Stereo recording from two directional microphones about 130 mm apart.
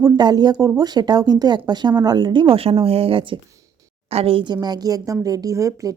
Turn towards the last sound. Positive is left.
turn(degrees=-25)  # may be behind; listen again after turning